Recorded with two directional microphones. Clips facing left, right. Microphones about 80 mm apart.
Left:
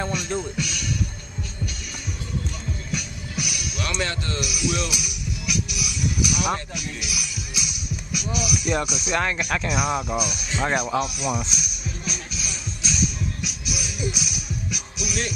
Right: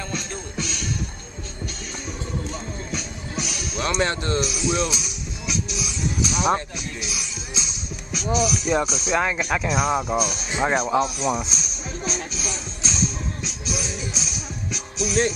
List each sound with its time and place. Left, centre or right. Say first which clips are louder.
0.6 s music: even; right
2.9 s music: right 1 dB; right
9.1 s speech: right 2 dB; centre
9.7 s speech: right 3 dB; right
12.0 s music: right 7 dB; right